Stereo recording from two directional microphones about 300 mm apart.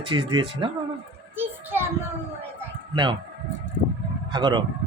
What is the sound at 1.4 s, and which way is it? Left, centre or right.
Children playing, centre.